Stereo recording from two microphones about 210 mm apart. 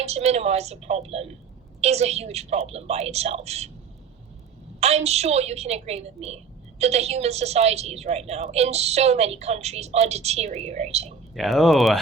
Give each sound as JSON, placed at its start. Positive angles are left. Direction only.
{"t": 0.0, "sound": "a woman's voice", "side_deg": -30}
{"t": 4.8, "sound": "a woman's voice", "side_deg": -30}
{"t": 11.3, "sound": "speech", "side_deg": 0}